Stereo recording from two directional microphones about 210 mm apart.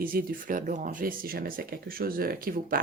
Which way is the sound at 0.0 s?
45° right (ahead or behind).